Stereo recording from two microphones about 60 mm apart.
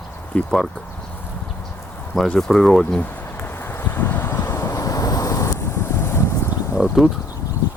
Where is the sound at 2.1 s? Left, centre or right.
Centre.